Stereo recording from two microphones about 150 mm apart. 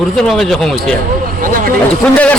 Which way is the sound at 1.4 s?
65° right (ahead or behind).